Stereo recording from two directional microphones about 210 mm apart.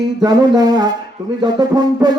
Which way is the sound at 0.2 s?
20° right (ahead or behind).